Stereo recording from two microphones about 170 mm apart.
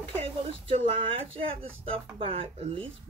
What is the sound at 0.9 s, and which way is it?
Speech, 35° right (ahead or behind).